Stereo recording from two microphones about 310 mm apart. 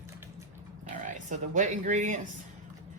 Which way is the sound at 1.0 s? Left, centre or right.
Right.